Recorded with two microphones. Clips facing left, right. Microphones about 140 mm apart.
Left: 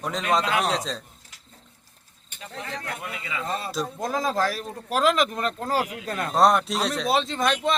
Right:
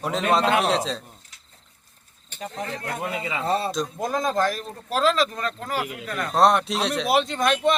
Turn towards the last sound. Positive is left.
turn(degrees=0)  # may be behind; listen again after turning